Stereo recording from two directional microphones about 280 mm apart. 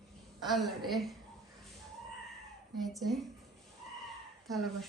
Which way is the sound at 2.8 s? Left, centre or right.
Centre.